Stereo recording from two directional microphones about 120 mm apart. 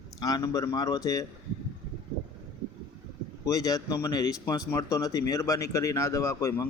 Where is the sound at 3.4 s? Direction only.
30° left (ahead or behind).